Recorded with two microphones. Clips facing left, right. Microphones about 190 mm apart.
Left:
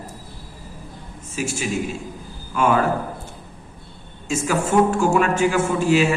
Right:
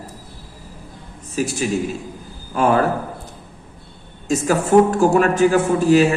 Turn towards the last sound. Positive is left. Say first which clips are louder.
# right 4 dB
turn(degrees=-40)  # may be behind; listen again after turning